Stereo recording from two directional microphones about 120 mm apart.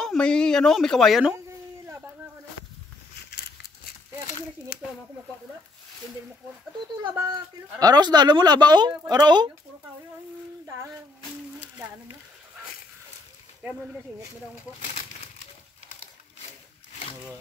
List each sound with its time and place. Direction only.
0.0 s speech: 5° left (ahead or behind)
1.3 s a sound: 20° right (ahead or behind)
7.8 s speech: 35° right (ahead or behind)
13.6 s speech: 10° right (ahead or behind)